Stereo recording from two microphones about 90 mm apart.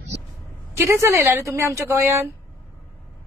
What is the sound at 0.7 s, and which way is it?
A woman's voice, 30° right (ahead or behind).